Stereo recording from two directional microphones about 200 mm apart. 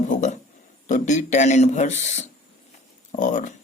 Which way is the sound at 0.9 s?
40° left (ahead or behind).